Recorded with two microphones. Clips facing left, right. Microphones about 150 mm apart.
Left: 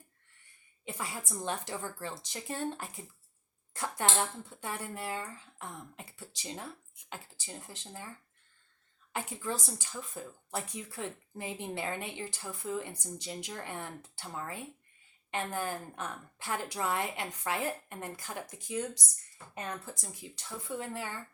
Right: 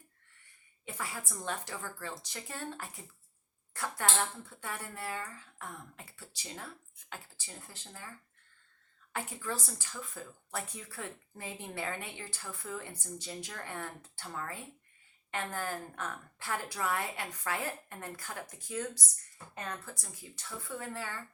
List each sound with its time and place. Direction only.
0.9 s speech: 20° left (ahead or behind)
9.1 s speech: 20° left (ahead or behind)